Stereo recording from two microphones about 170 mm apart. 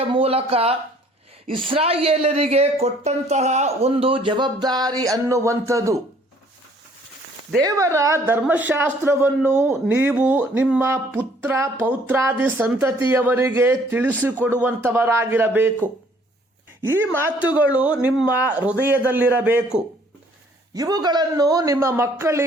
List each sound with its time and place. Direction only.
0.1 s speech: 35° right (ahead or behind); by 6.0 s 20° right (ahead or behind)
7.6 s speech: 20° right (ahead or behind)
20.7 s a man's voice: 20° right (ahead or behind)